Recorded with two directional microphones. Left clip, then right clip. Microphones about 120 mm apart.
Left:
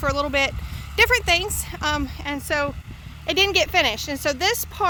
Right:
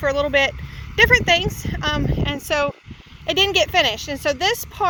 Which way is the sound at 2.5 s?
25° left (ahead or behind).